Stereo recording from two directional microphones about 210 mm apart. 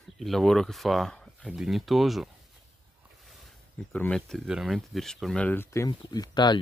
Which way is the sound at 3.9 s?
5° left (ahead or behind).